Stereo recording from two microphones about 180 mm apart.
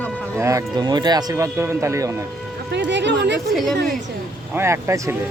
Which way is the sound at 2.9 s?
75° right (ahead or behind).